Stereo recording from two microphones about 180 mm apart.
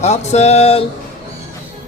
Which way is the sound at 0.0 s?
40° left (ahead or behind).